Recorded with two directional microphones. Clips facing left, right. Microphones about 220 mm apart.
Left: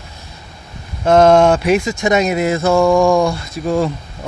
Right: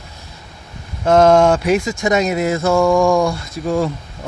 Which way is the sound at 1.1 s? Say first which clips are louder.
Left 1 dB; 25° left (ahead or behind).